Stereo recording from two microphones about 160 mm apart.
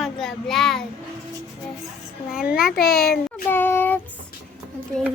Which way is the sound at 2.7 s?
75° left (ahead or behind).